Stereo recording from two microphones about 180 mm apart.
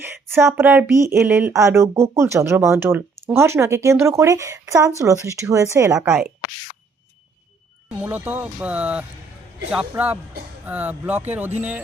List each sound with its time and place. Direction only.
0.0 s speech: 10° right (ahead or behind)
7.9 s speech: 10° right (ahead or behind)